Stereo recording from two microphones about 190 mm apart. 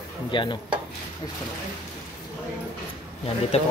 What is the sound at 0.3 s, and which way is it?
Speech, 25° left (ahead or behind).